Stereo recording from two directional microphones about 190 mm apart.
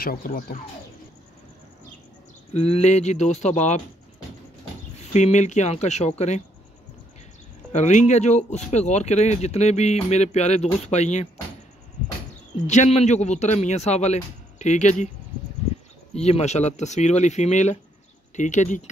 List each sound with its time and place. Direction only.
0.0 s speech: 50° left (ahead or behind)
2.5 s speech: 35° left (ahead or behind)
4.9 s speech: 35° left (ahead or behind)
7.7 s speech: 35° left (ahead or behind)
12.6 s speech: 35° left (ahead or behind)
16.2 s speech: 35° left (ahead or behind)